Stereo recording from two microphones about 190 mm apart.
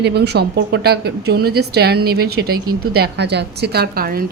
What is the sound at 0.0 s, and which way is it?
Speech, 60° right (ahead or behind).